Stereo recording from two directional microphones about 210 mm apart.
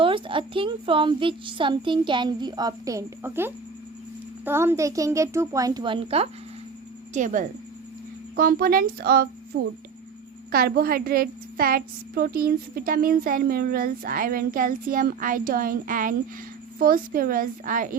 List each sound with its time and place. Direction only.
0.0 s a woman's voice: 25° right (ahead or behind)
7.1 s a woman's voice: 35° right (ahead or behind)